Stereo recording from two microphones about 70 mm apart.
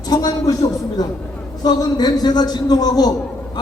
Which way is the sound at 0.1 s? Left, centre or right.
Left.